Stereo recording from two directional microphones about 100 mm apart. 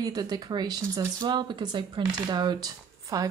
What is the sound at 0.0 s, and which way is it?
A woman's voice, 40° right (ahead or behind).